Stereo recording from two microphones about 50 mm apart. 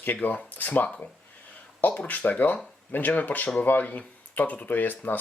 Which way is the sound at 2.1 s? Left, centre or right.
Left.